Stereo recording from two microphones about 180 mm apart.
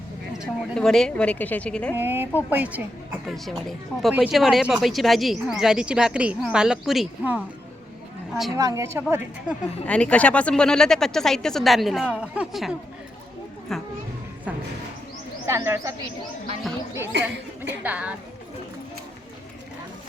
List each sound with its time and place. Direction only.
0.3 s a woman's voice: centre (ahead or behind)
2.0 s a woman's voice: 10° right (ahead or behind)
8.5 s a woman's voice: 20° right (ahead or behind)
9.8 s speech: 5° left (ahead or behind)
15.4 s a woman's voice: 15° right (ahead or behind)
17.8 s a woman's voice: 10° right (ahead or behind)